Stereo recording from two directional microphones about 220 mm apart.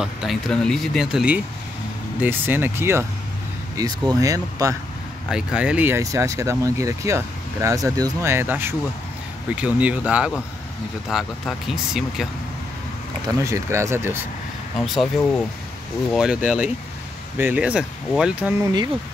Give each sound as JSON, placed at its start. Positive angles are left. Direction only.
{"t": 0.0, "sound": "speech", "side_deg": 0}
{"t": 5.3, "sound": "speech", "side_deg": -5}
{"t": 13.4, "sound": "speech", "side_deg": -15}
{"t": 14.8, "sound": "speech", "side_deg": 0}